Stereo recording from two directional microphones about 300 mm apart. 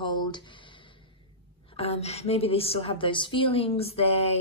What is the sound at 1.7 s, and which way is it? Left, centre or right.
A woman's voice, centre.